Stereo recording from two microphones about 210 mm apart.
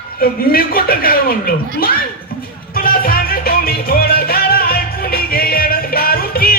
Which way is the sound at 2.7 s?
45° left (ahead or behind).